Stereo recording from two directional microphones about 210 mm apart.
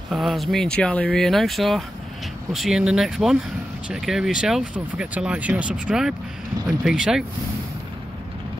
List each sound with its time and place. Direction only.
0.1 s speech: centre (ahead or behind)